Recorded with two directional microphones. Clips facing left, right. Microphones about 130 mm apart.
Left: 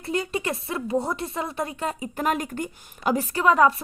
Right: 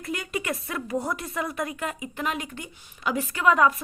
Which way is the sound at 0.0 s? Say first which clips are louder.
Left 4 dB; 30° left (ahead or behind).